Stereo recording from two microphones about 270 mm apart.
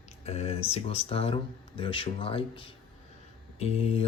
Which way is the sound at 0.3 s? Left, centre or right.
Left.